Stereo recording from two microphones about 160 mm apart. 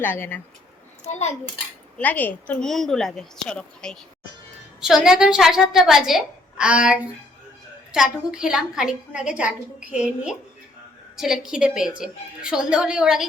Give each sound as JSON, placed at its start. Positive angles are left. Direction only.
{"t": 0.0, "sound": "speech", "side_deg": 10}
{"t": 1.0, "sound": "a child's voice", "side_deg": 45}
{"t": 2.0, "sound": "a woman's voice", "side_deg": 10}